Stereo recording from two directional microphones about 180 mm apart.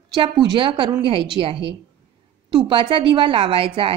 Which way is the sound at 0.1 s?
25° right (ahead or behind).